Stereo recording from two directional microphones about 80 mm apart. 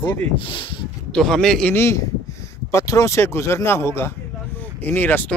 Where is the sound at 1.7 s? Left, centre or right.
Left.